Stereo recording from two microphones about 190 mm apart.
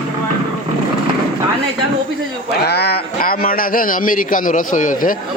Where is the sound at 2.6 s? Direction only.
55° left (ahead or behind).